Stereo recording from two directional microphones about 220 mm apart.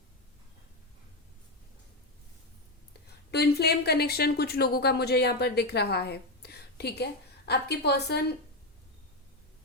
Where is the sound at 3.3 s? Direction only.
45° left (ahead or behind).